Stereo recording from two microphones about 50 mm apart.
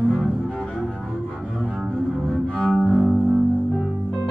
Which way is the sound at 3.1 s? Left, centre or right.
Centre.